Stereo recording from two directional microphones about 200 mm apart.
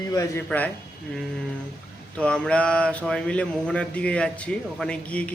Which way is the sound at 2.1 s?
5° left (ahead or behind).